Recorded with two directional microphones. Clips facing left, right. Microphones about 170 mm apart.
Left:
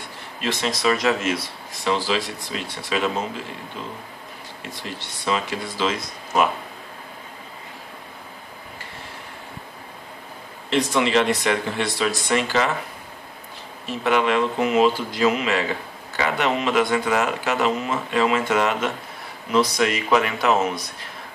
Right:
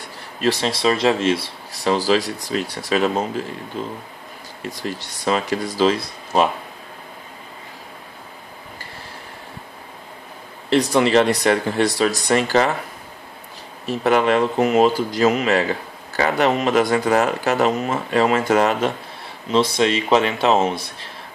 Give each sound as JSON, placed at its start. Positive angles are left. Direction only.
{"t": 0.4, "sound": "speech", "side_deg": -35}
{"t": 10.7, "sound": "speech", "side_deg": -35}
{"t": 13.8, "sound": "speech", "side_deg": -40}
{"t": 19.5, "sound": "speech", "side_deg": -25}